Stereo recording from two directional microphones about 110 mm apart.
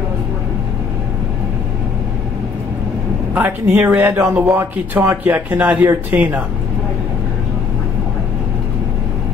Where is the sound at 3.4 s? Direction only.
15° right (ahead or behind).